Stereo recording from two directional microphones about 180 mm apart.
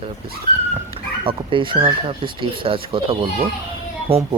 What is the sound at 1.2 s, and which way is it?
Speech, 30° right (ahead or behind).